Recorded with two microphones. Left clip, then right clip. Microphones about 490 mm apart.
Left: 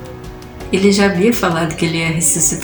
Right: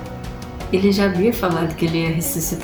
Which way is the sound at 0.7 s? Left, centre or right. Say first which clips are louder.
Left 5 dB; right.